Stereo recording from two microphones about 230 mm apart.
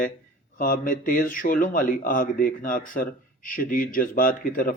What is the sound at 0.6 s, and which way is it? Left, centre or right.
A man's voice, left.